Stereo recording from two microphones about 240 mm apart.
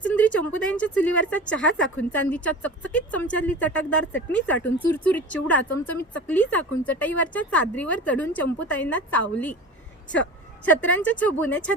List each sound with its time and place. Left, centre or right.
0.0 s a woman's voice: centre
1.5 s speech: left
2.0 s speech: centre
10.7 s speech: centre